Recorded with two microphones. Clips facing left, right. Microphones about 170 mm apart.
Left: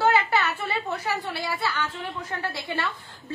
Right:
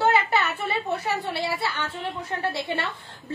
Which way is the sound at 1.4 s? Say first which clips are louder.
Right 1 dB; 25° right (ahead or behind).